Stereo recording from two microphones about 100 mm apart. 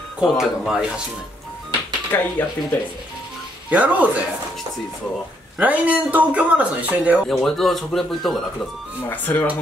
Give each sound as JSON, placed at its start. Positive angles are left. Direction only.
{"t": 0.2, "sound": "speech", "side_deg": -5}
{"t": 2.1, "sound": "speech", "side_deg": 25}
{"t": 3.7, "sound": "speech", "side_deg": -15}
{"t": 5.6, "sound": "speech", "side_deg": -15}
{"t": 7.2, "sound": "speech", "side_deg": 5}
{"t": 9.1, "sound": "speech", "side_deg": 20}